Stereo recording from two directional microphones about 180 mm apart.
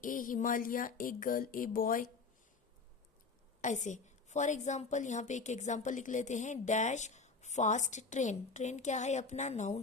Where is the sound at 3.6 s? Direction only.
40° left (ahead or behind).